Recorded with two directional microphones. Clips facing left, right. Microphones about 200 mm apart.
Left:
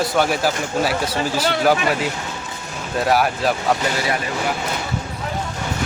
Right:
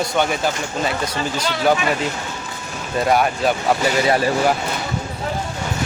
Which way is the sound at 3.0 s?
Centre (ahead or behind).